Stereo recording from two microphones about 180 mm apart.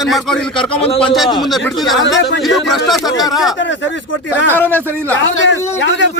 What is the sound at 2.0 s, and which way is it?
Speech, 90° left.